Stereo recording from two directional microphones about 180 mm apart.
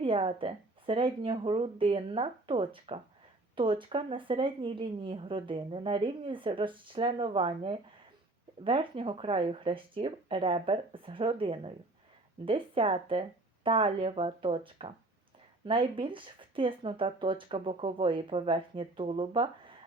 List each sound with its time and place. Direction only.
0.0 s a woman's voice: 30° right (ahead or behind)